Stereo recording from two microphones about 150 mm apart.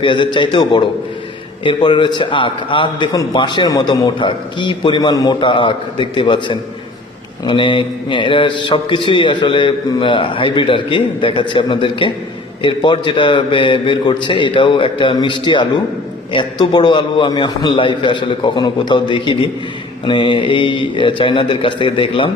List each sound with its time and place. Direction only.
0.0 s a man's voice: 35° left (ahead or behind)